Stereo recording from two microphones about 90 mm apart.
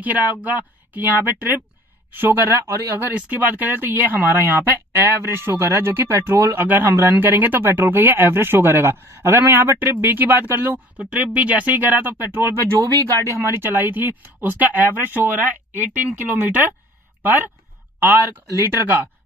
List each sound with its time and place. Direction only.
0.0 s speech: 20° right (ahead or behind)
11.1 s speech: 15° right (ahead or behind)